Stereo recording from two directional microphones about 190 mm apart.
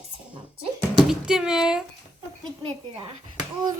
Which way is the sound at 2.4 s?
25° right (ahead or behind).